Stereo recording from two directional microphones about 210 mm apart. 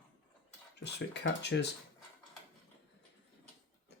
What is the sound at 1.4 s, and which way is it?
Speech, 55° left (ahead or behind).